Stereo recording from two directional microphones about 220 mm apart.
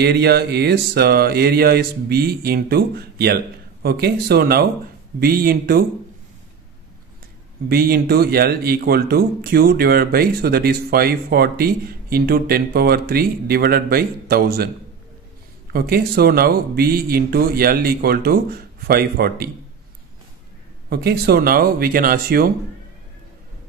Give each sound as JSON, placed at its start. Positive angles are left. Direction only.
{"t": 0.0, "sound": "speech", "side_deg": -45}
{"t": 7.6, "sound": "speech", "side_deg": -45}
{"t": 15.7, "sound": "speech", "side_deg": -45}
{"t": 20.9, "sound": "speech", "side_deg": -45}